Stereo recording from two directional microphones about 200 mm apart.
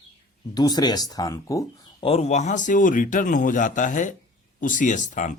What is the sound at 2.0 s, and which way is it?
Speech, 30° left (ahead or behind).